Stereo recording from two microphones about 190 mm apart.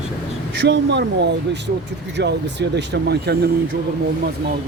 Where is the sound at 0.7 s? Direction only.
65° right (ahead or behind).